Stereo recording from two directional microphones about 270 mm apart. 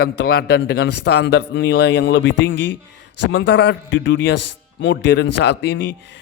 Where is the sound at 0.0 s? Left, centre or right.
Left.